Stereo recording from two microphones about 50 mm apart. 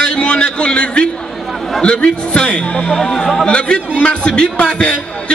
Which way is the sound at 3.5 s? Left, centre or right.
Left.